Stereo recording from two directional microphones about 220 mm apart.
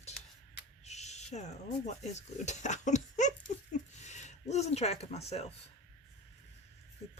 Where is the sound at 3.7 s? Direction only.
30° left (ahead or behind).